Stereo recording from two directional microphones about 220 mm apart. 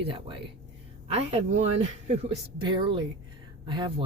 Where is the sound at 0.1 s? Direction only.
25° right (ahead or behind).